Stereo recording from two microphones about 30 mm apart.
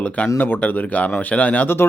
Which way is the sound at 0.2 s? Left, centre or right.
Left.